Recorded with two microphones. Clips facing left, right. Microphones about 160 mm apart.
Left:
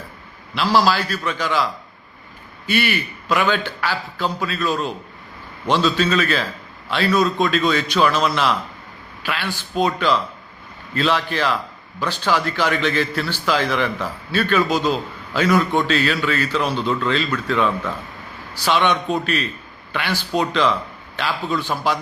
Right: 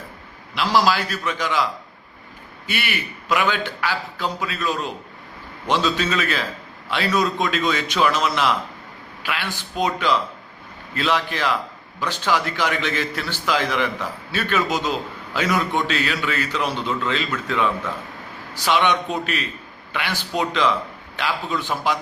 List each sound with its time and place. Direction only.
0.5 s a man's voice: 15° right (ahead or behind)
2.6 s a man's voice: 15° right (ahead or behind)